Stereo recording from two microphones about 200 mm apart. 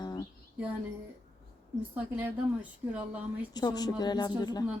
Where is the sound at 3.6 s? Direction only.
20° left (ahead or behind).